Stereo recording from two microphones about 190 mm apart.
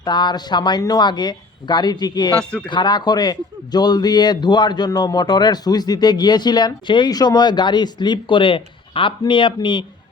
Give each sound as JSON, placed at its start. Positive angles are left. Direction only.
{"t": 0.0, "sound": "a man's voice", "side_deg": 25}
{"t": 2.4, "sound": "speech", "side_deg": 5}
{"t": 2.6, "sound": "a man's voice", "side_deg": 25}